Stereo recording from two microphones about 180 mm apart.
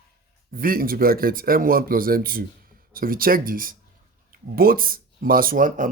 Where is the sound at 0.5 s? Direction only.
55° right (ahead or behind).